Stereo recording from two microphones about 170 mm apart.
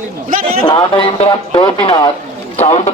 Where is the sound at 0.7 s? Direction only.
25° left (ahead or behind).